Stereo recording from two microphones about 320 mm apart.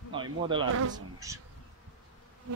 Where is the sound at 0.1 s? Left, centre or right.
Centre.